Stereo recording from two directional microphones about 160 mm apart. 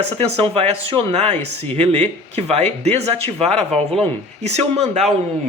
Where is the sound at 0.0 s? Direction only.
40° right (ahead or behind).